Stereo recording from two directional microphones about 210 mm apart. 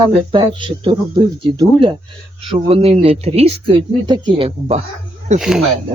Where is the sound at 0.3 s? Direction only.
25° right (ahead or behind).